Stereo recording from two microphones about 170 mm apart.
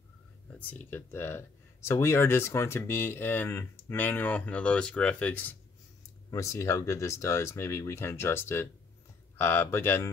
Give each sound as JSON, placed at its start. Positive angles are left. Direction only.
{"t": 0.5, "sound": "speech", "side_deg": 10}